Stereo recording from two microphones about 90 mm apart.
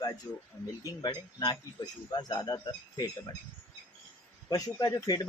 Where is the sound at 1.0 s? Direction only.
55° left (ahead or behind).